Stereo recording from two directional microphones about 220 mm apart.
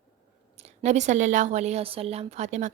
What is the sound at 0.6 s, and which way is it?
A woman's voice, 30° right (ahead or behind).